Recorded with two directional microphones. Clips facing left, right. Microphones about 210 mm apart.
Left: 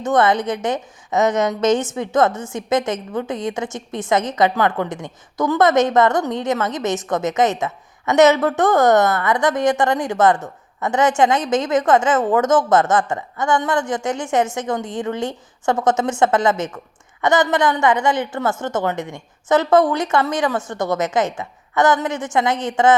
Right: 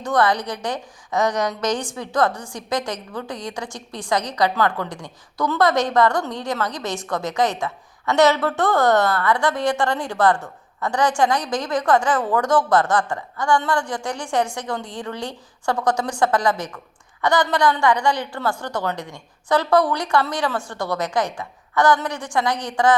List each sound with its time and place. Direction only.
0.0 s a woman's voice: 20° left (ahead or behind)